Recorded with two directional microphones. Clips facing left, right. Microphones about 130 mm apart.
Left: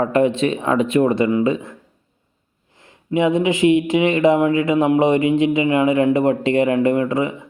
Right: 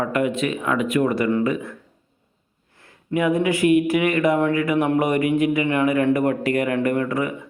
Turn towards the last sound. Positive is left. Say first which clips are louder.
# left 3 dB
turn(degrees=20)  # may be behind; listen again after turning